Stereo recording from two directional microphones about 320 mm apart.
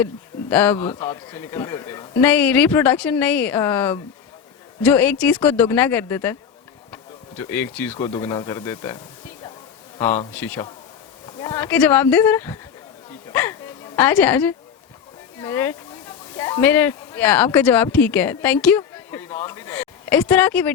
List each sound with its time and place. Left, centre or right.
0.5 s a man's voice: centre
10.3 s speech: centre
13.3 s dog: centre
15.4 s speech: centre